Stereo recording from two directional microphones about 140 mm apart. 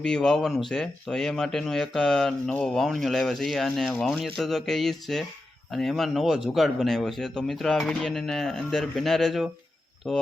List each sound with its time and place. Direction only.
0.0 s speech: 5° left (ahead or behind)